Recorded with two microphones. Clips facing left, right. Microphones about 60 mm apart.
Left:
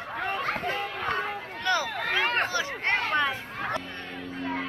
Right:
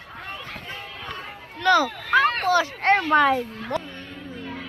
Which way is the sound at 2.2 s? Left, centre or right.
Left.